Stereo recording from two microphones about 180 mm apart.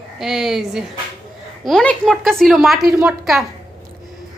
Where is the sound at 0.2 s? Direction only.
Centre (ahead or behind).